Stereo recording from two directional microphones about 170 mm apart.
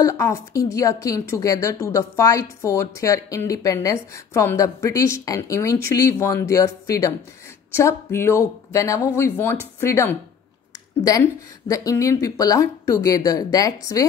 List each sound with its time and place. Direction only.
0.0 s a woman's voice: 20° left (ahead or behind)